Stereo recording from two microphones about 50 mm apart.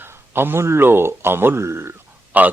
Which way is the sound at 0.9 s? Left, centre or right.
Right.